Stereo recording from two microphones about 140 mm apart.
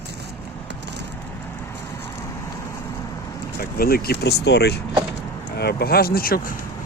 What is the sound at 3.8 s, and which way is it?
Speech, 90° left.